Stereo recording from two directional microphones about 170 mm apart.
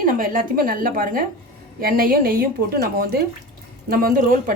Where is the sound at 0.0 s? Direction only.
55° right (ahead or behind).